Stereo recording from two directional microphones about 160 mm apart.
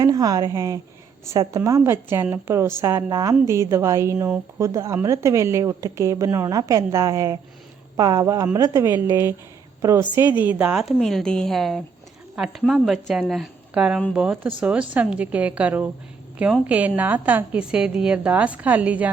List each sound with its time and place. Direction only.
0.0 s a woman's voice: 25° right (ahead or behind)